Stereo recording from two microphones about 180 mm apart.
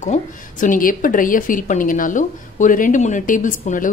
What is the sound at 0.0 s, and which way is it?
A woman's voice, 45° left (ahead or behind).